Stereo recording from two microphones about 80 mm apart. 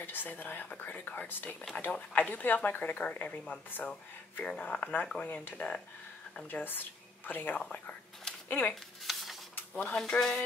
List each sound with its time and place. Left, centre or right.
0.0 s speech: left
9.0 s a sound: centre
9.8 s speech: centre